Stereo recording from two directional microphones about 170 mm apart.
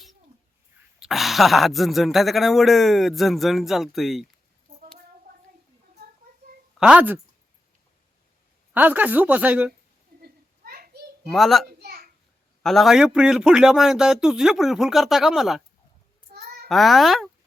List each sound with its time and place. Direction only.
0.9 s speech: centre (ahead or behind)
6.7 s a woman's voice: 5° right (ahead or behind)
8.7 s a woman's voice: 10° right (ahead or behind)
10.2 s children playing: 65° right (ahead or behind)
11.3 s speech: centre (ahead or behind)
11.8 s a sound: 65° right (ahead or behind)
12.6 s speech: centre (ahead or behind)
16.6 s speech: centre (ahead or behind)